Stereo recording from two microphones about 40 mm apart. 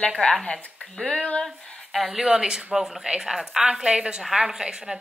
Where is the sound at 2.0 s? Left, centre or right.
Centre.